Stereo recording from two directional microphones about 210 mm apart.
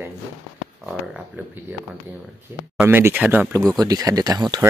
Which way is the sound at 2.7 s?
10° right (ahead or behind).